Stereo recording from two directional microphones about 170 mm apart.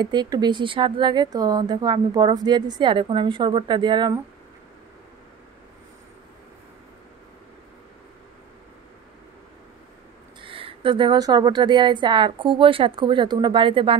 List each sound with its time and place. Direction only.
0.0 s speech: 25° right (ahead or behind)
10.4 s speech: 30° right (ahead or behind)